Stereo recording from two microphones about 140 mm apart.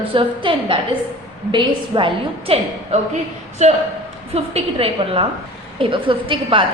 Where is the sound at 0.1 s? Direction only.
40° right (ahead or behind).